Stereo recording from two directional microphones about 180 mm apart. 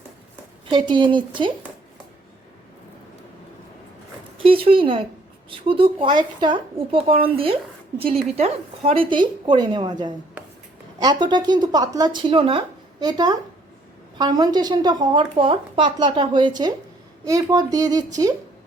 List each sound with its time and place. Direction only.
0.7 s a woman's voice: 25° right (ahead or behind)
4.4 s a woman's voice: 30° right (ahead or behind)